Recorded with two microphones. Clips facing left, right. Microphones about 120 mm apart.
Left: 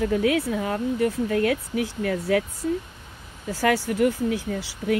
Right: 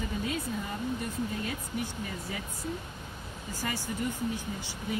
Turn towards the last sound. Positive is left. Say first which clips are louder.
# left 10 dB
turn(degrees=80)